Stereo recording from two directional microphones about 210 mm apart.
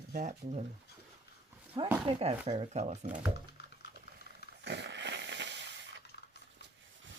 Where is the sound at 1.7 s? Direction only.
20° right (ahead or behind).